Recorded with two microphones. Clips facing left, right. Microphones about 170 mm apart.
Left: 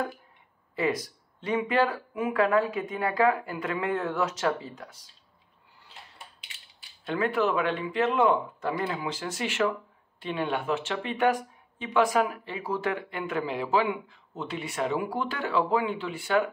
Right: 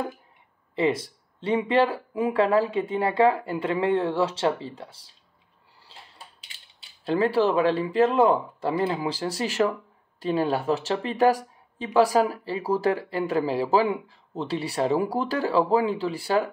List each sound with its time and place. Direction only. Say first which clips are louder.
0.7 s speech: right 4 dB; 30° right (ahead or behind)